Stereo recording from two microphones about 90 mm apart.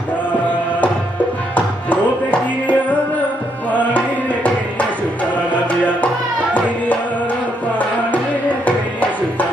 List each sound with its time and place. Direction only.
1.5 s music: 15° left (ahead or behind)
3.7 s tabla: 15° left (ahead or behind)
8.1 s music: 15° left (ahead or behind)